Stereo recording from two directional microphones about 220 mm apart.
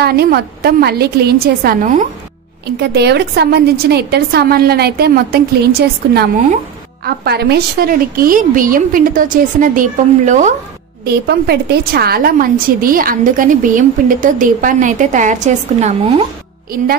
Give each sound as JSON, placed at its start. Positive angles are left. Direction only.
{"t": 0.0, "sound": "a woman's voice", "side_deg": -45}
{"t": 11.1, "sound": "a woman's voice", "side_deg": -45}